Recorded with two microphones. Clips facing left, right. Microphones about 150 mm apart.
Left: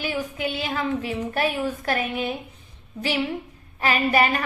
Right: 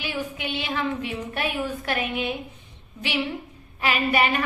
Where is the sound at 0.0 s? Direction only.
40° left (ahead or behind).